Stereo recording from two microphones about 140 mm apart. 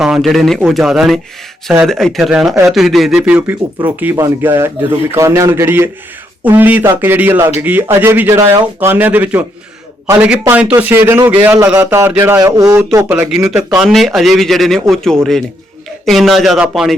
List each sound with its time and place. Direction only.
0.0 s a man's voice: 5° right (ahead or behind); by 13.2 s 20° right (ahead or behind)
13.3 s a man's voice: 5° right (ahead or behind)